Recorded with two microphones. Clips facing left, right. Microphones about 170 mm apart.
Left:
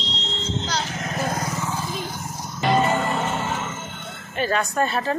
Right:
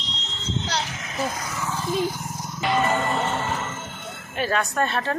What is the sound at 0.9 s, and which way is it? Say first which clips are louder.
Vehicle: left 3 dB; 50° left (ahead or behind).